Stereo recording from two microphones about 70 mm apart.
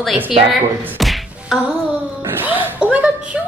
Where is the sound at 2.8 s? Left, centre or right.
Centre.